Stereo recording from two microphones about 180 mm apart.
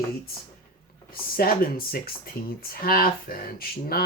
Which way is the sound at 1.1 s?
55° left (ahead or behind).